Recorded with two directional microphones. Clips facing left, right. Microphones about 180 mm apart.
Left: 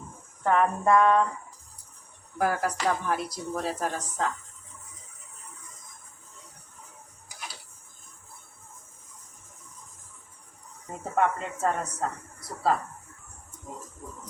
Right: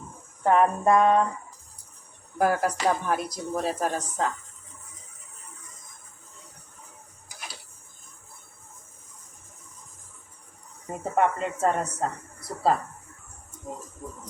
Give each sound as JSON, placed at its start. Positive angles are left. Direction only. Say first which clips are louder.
{"t": 0.4, "sound": "speech", "louder": "right 3 dB", "side_deg": -20}
{"t": 2.4, "sound": "speech", "louder": "right 3 dB", "side_deg": -20}
{"t": 10.8, "sound": "speech", "louder": "right 2 dB", "side_deg": -20}